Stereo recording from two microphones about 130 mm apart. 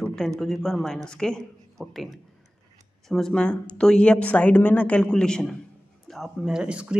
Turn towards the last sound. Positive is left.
turn(degrees=-10)  # may be behind; listen again after turning